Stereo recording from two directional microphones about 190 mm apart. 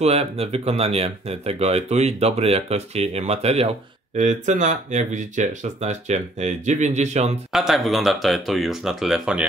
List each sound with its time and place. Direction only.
0.0 s speech: 35° right (ahead or behind)
7.5 s speech: centre (ahead or behind)